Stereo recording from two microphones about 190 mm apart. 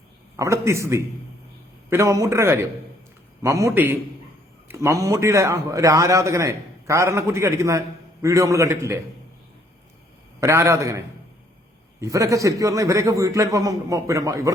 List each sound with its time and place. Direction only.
0.3 s a man's voice: 15° right (ahead or behind)
10.4 s a man's voice: 15° right (ahead or behind)